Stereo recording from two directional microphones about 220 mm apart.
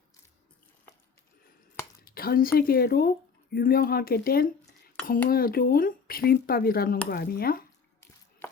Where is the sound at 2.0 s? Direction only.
40° left (ahead or behind).